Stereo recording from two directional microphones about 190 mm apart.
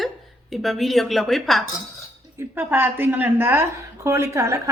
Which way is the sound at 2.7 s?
10° right (ahead or behind).